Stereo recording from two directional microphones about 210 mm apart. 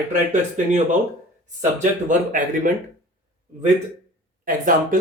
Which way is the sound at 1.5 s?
35° right (ahead or behind).